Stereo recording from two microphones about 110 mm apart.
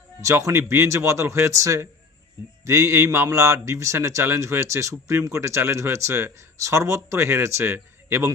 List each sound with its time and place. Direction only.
0.2 s a man's voice: 30° right (ahead or behind)